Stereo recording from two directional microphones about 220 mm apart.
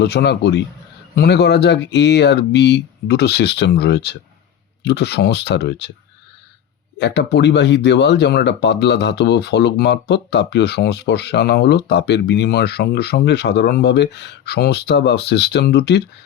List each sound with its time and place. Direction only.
0.0 s speech: 50° left (ahead or behind)
7.0 s speech: 50° left (ahead or behind)